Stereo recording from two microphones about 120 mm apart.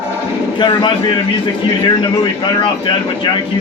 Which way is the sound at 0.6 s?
40° left (ahead or behind).